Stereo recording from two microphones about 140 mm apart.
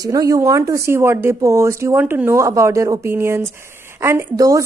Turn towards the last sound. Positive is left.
turn(degrees=-25)  # may be behind; listen again after turning